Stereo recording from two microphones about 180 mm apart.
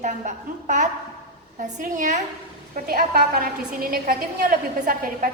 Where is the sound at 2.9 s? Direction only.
55° right (ahead or behind).